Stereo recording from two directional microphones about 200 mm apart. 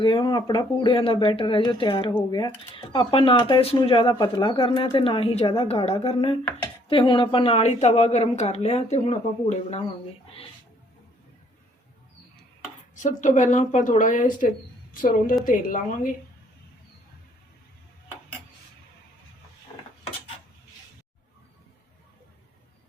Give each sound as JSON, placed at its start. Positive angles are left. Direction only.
{"t": 0.0, "sound": "a woman's voice", "side_deg": 25}
{"t": 13.0, "sound": "a woman's voice", "side_deg": 40}